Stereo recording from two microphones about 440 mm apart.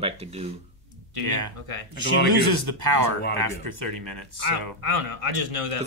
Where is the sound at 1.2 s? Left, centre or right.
Right.